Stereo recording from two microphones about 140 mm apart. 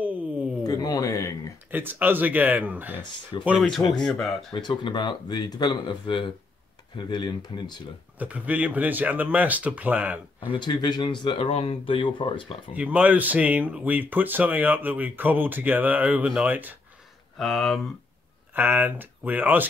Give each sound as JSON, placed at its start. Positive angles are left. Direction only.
{"t": 0.7, "sound": "speech", "side_deg": 25}
{"t": 1.7, "sound": "speech", "side_deg": -15}
{"t": 3.3, "sound": "speech", "side_deg": 35}
{"t": 4.0, "sound": "speech", "side_deg": 0}
{"t": 4.5, "sound": "speech", "side_deg": 30}
{"t": 8.2, "sound": "speech", "side_deg": -10}
{"t": 10.4, "sound": "speech", "side_deg": 35}
{"t": 12.7, "sound": "speech", "side_deg": -10}
{"t": 17.4, "sound": "speech", "side_deg": 0}
{"t": 18.5, "sound": "speech", "side_deg": -15}